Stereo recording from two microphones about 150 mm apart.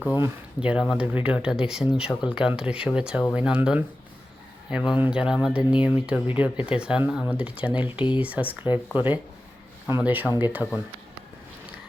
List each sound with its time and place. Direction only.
0.0 s speech: 10° right (ahead or behind)
7.9 s speech: 35° left (ahead or behind)
8.2 s speech: 10° right (ahead or behind)